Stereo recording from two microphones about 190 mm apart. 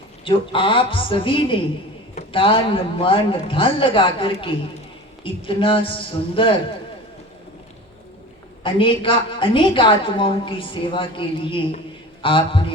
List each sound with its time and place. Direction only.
0.3 s a woman's voice: 25° left (ahead or behind)
8.6 s a woman's voice: 25° left (ahead or behind)